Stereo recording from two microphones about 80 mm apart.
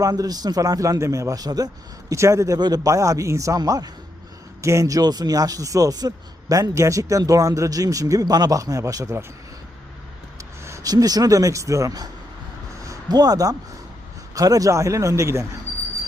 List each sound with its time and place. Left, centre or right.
0.0 s a man's voice: right
2.6 s a man's voice: right
3.6 s speech: right
4.6 s a man's voice: right
10.8 s a man's voice: right